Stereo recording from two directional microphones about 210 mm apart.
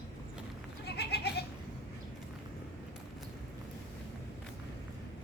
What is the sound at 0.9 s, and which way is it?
Goat, 50° left (ahead or behind).